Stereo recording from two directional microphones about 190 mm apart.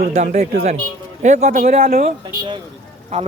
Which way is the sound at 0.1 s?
40° right (ahead or behind).